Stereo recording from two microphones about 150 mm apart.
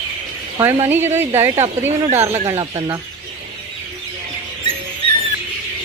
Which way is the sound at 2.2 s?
15° right (ahead or behind).